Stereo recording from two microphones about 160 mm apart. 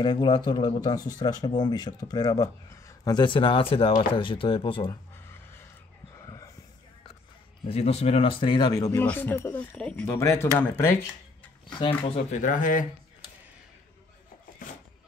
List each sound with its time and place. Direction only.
0.0 s speech: 30° left (ahead or behind)
5.1 s a sound: 15° left (ahead or behind)
7.6 s speech: 40° left (ahead or behind); by 9.0 s 20° left (ahead or behind)
9.0 s speech: 10° left (ahead or behind)
10.1 s speech: 20° left (ahead or behind)
11.8 s speech: 40° left (ahead or behind)
12.4 s speech: 55° left (ahead or behind)